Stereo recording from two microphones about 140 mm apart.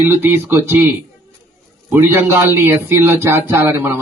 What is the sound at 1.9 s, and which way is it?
Speech, 15° right (ahead or behind).